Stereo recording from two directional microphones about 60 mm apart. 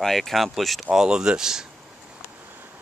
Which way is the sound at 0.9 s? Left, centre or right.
Centre.